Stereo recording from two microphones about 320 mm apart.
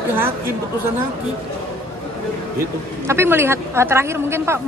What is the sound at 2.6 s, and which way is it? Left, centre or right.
A woman's voice, centre.